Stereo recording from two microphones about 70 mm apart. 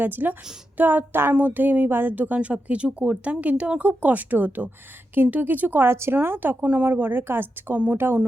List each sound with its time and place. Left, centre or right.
0.0 s speech: right